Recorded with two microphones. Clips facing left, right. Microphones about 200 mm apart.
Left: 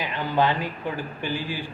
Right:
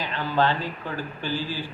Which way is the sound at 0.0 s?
15° left (ahead or behind).